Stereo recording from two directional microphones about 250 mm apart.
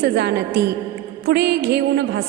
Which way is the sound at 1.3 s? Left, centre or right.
Right.